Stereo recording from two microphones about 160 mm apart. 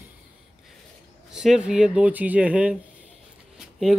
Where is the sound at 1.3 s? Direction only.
5° right (ahead or behind).